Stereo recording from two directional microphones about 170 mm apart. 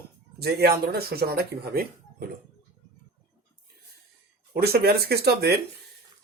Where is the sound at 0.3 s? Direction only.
70° right (ahead or behind).